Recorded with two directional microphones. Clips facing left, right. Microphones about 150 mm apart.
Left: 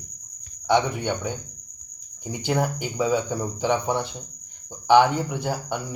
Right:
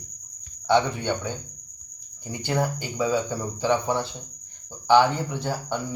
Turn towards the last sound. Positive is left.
turn(degrees=15)  # may be behind; listen again after turning